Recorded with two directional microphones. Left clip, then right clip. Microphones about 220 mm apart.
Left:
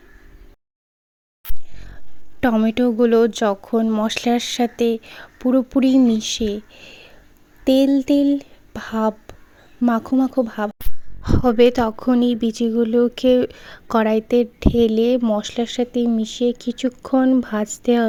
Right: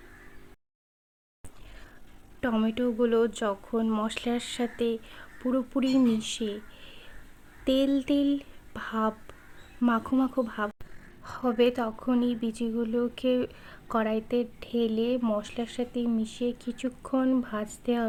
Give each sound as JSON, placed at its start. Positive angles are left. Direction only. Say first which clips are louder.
{"t": 2.4, "sound": "speech", "louder": "left 10 dB", "side_deg": 35}
{"t": 11.2, "sound": "speech", "louder": "left 11 dB", "side_deg": 35}